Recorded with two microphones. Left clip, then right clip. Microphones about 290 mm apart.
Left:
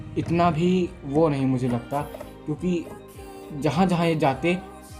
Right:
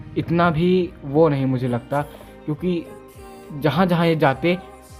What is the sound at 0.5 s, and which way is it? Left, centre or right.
Speech, right.